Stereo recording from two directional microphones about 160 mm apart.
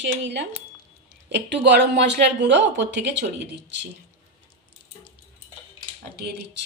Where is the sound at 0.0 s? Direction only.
90° right.